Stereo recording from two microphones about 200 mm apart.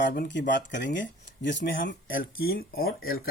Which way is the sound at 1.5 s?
40° left (ahead or behind).